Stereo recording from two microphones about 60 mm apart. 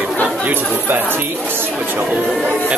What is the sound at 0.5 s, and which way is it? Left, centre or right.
Speech, right.